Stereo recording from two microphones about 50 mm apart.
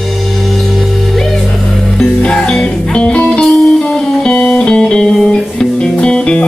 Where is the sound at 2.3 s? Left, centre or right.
Centre.